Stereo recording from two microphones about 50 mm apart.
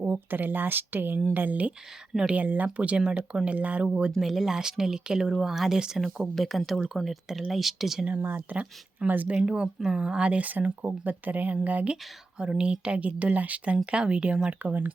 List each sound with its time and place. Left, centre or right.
0.0 s speech: right; by 3.5 s centre
3.5 s speech: right
3.8 s speech: centre
4.2 s speech: centre
6.3 s speech: centre
8.2 s speech: right
9.3 s speech: centre; by 11.9 s right
12.4 s speech: right
14.6 s speech: right